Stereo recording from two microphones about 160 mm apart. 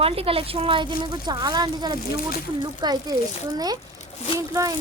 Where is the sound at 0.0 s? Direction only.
35° right (ahead or behind).